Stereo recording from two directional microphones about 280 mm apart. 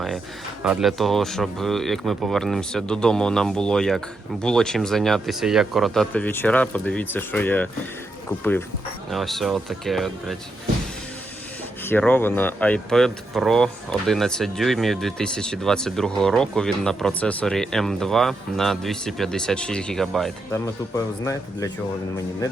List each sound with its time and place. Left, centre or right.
0.6 s speech: centre
9.0 s speech: centre
11.9 s speech: centre
20.9 s speech: centre